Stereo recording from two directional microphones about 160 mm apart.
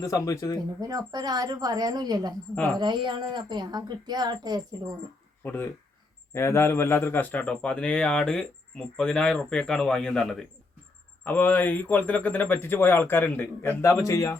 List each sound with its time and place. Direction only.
0.0 s speech: 20° left (ahead or behind)
0.8 s a woman's voice: 25° right (ahead or behind)
5.4 s a man's voice: 15° left (ahead or behind)